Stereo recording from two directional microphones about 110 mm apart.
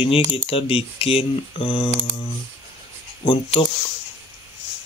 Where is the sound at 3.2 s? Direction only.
50° left (ahead or behind).